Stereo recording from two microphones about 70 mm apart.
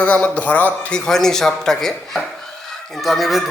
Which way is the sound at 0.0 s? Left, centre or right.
Centre.